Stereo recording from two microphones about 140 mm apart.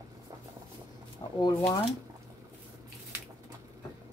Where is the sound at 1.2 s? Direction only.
30° left (ahead or behind).